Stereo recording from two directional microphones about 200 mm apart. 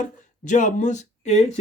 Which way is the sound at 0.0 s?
40° left (ahead or behind).